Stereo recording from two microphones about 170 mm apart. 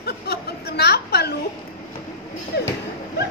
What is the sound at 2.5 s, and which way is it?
Speech, 75° left (ahead or behind).